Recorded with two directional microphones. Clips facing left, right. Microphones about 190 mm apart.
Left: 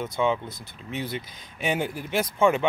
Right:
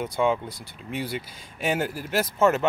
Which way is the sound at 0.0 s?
10° right (ahead or behind).